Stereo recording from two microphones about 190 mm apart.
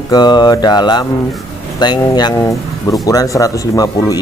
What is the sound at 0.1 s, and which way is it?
Speech, 20° left (ahead or behind).